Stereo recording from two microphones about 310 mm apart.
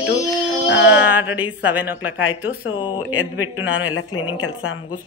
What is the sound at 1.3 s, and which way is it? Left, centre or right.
A woman's voice, centre.